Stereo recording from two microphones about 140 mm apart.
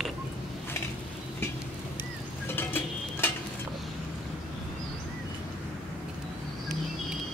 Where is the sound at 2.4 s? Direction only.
15° left (ahead or behind).